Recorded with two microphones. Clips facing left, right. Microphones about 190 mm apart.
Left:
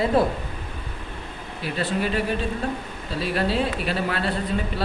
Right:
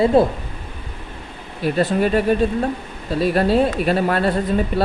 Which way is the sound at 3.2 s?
45° right (ahead or behind).